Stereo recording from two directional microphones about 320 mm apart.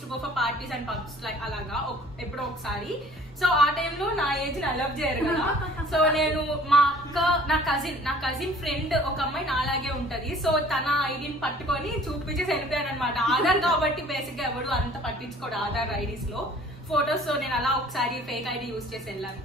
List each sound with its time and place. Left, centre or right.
0.4 s speech: centre
3.3 s speech: centre
16.9 s speech: centre